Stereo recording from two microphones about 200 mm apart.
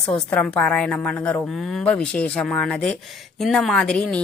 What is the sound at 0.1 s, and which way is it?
Speech, 5° left (ahead or behind).